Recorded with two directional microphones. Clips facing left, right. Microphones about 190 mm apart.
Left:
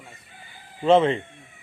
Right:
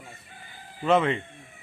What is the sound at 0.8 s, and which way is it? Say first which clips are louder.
Speech: left 5 dB; 30° left (ahead or behind).